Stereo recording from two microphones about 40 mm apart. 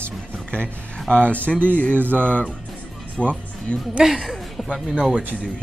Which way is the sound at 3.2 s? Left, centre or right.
Left.